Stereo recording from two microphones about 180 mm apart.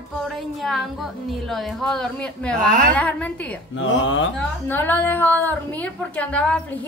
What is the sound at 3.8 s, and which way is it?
Speech, 90° left.